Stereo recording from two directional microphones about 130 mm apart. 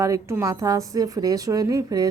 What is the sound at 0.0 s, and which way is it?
A woman's voice, 20° right (ahead or behind).